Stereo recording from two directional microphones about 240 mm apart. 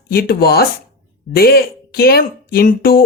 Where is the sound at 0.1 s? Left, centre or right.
Left.